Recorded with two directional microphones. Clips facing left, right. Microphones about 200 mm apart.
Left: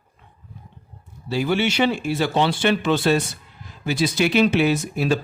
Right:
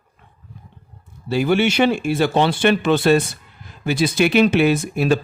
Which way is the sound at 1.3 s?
55° right (ahead or behind).